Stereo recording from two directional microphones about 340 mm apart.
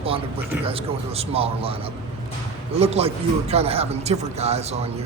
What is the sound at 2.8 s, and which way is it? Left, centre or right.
A man's voice, centre.